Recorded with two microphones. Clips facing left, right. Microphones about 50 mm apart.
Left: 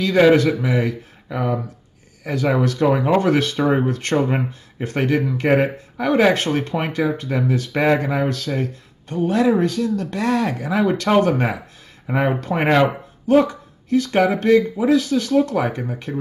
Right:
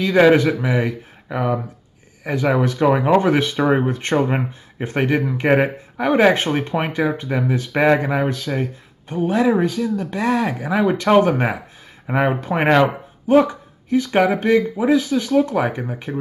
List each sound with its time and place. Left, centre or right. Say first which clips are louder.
0.0 s speech: right 1 dB; centre